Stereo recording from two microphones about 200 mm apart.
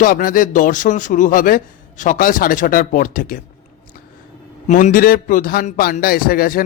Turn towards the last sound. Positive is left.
turn(degrees=45)  # may be behind; listen again after turning